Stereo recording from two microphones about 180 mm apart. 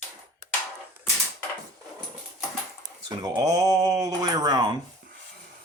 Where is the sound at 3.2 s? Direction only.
20° right (ahead or behind).